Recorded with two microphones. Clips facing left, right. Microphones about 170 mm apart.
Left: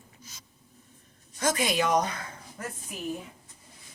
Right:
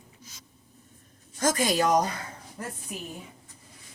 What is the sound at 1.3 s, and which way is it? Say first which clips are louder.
Speech: right 2 dB; 40° right (ahead or behind).